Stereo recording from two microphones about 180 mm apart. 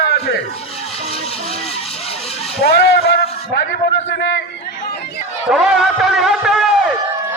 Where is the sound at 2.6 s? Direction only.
65° left (ahead or behind).